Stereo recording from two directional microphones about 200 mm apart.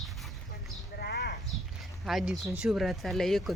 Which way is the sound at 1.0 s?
55° left (ahead or behind).